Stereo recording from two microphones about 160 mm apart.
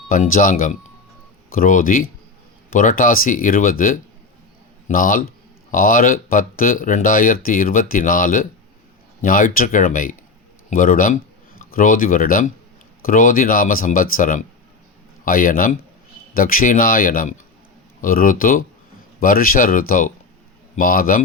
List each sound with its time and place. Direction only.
0.1 s speech: 55° left (ahead or behind)
1.5 s speech: 55° left (ahead or behind)